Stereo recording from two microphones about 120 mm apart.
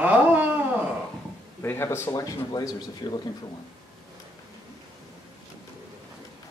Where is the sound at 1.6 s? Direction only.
20° left (ahead or behind).